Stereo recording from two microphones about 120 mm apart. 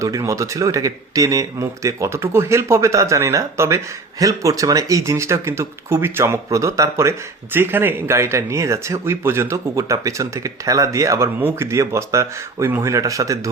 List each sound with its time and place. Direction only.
0.0 s speech: 25° right (ahead or behind)